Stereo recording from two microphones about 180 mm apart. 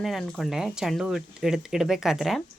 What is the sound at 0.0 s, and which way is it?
Speech, centre (ahead or behind).